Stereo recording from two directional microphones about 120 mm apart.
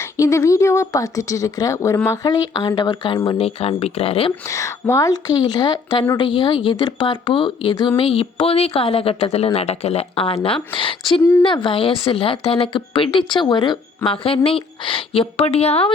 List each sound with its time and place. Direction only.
0.0 s speech: 25° left (ahead or behind)
3.3 s speech: 55° left (ahead or behind)
4.4 s speech: 25° left (ahead or behind); by 15.9 s 60° left (ahead or behind)